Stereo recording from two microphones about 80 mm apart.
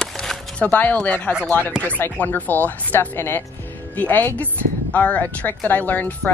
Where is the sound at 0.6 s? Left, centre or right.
Centre.